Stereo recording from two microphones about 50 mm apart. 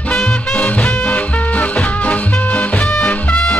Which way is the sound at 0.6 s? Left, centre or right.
Left.